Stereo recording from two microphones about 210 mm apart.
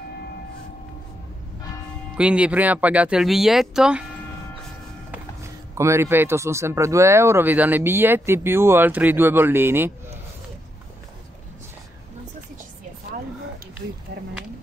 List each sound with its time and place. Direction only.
2.1 s speech: 5° right (ahead or behind)
5.8 s speech: 15° right (ahead or behind)